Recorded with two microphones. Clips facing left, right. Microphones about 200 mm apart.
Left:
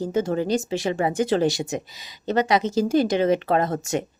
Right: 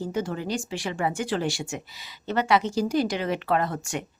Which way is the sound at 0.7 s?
20° left (ahead or behind).